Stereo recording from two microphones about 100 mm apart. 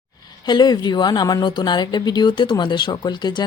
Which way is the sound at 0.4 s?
45° left (ahead or behind).